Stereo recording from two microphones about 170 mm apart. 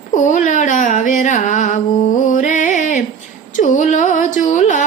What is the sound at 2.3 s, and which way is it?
Music, 50° left (ahead or behind).